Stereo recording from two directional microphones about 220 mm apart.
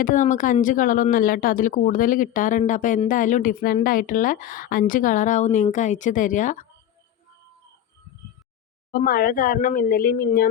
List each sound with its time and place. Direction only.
0.0 s a woman's voice: 35° left (ahead or behind)
8.9 s a woman's voice: 40° left (ahead or behind)